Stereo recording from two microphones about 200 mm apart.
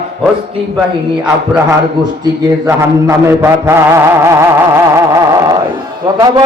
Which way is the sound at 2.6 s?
15° right (ahead or behind).